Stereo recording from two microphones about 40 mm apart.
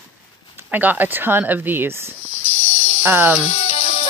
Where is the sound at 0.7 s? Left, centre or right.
Right.